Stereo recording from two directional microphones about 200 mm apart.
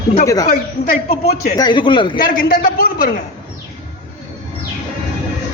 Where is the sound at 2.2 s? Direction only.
45° left (ahead or behind).